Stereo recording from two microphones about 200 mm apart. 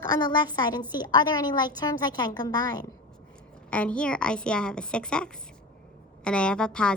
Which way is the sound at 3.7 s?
5° left (ahead or behind).